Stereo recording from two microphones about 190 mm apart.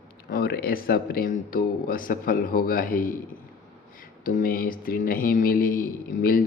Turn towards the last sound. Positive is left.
turn(degrees=50)  # may be behind; listen again after turning